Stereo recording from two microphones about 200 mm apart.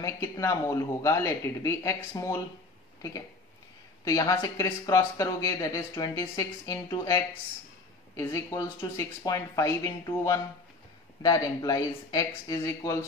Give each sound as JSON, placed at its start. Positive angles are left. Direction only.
{"t": 0.0, "sound": "speech", "side_deg": 15}
{"t": 8.2, "sound": "speech", "side_deg": 15}